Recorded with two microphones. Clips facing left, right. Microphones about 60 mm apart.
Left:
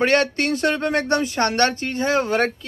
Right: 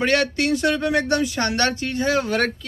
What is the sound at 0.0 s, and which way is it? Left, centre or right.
Speech, left.